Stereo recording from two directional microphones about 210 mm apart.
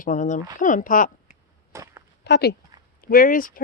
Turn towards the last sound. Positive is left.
turn(degrees=40)  # may be behind; listen again after turning